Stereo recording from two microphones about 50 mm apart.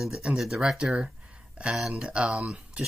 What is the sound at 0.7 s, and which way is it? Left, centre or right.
Speech, centre.